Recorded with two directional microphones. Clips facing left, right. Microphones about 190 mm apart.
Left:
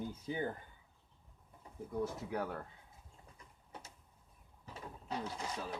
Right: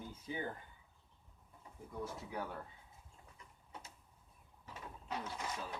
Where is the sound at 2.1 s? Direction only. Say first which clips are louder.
Left 4 dB; 45° left (ahead or behind).